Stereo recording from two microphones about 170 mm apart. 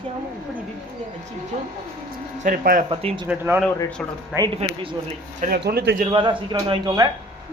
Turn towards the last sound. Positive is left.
turn(degrees=-25)  # may be behind; listen again after turning